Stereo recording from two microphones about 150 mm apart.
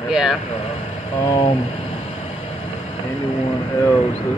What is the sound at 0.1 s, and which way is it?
Speech, 5° right (ahead or behind).